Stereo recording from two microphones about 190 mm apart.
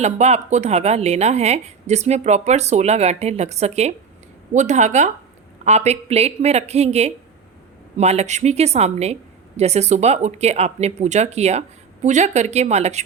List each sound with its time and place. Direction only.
0.0 s a woman's voice: 35° right (ahead or behind)